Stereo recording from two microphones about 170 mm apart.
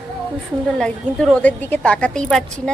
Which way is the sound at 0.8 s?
5° left (ahead or behind).